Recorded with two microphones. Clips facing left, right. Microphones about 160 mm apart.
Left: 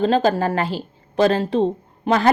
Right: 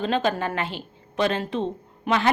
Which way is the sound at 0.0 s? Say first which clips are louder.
Left 6 dB; 35° left (ahead or behind).